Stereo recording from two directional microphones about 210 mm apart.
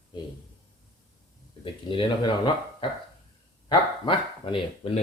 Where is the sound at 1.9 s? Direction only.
25° left (ahead or behind).